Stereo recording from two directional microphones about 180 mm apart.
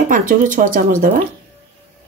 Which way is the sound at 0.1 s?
50° right (ahead or behind).